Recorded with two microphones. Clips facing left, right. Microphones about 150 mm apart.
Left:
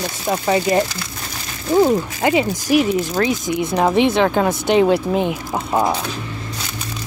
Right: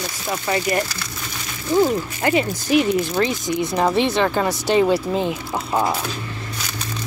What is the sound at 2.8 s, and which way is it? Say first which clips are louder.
Speech: left 1 dB; 5° left (ahead or behind).